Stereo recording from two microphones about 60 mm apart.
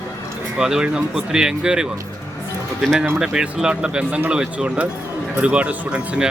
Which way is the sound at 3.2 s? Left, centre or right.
Centre.